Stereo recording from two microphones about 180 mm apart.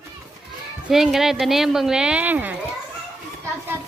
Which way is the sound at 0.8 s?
Centre (ahead or behind).